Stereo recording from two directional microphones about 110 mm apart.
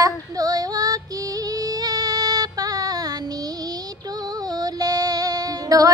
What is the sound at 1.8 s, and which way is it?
Music, 35° right (ahead or behind).